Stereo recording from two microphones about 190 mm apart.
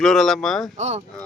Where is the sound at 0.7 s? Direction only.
35° right (ahead or behind).